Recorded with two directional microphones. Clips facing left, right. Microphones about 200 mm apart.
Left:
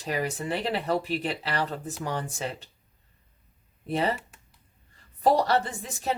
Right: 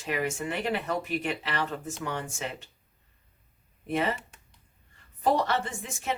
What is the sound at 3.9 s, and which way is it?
Speech, 35° left (ahead or behind).